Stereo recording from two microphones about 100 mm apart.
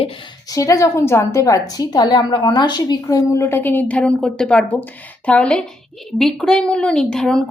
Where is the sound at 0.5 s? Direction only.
35° left (ahead or behind).